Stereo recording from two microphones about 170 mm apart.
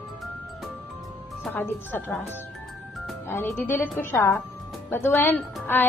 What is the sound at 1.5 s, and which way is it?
A woman's voice, 10° left (ahead or behind).